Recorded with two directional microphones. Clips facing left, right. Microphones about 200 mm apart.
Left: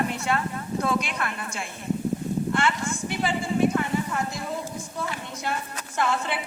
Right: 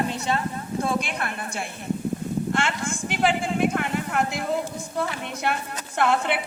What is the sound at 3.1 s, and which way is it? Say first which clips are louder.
A woman's voice: right 4 dB; 90° right.